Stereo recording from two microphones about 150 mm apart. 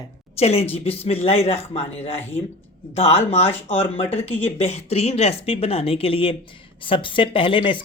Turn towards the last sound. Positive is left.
turn(degrees=35)  # may be behind; listen again after turning